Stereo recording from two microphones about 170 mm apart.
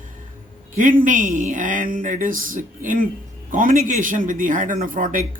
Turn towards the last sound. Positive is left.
turn(degrees=-50)  # may be behind; listen again after turning